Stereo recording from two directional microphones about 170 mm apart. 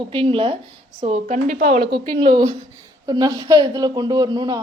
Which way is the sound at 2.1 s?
25° right (ahead or behind).